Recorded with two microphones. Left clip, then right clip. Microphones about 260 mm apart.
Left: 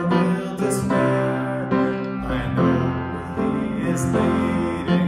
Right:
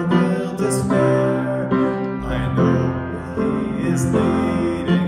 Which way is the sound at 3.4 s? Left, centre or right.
Centre.